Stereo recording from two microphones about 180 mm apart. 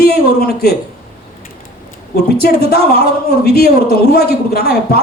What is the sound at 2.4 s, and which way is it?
A man's voice, 60° left (ahead or behind).